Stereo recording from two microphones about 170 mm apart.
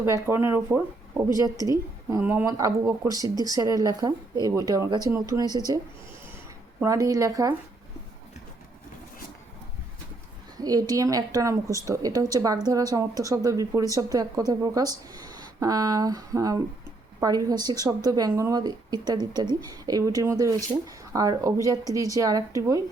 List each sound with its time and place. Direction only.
0.0 s speech: 15° right (ahead or behind)
10.6 s speech: 20° right (ahead or behind)